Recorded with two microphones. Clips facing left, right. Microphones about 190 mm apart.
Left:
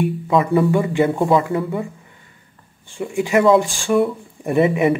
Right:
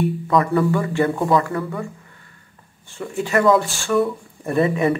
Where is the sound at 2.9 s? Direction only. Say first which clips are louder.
Left 3 dB; 15° left (ahead or behind).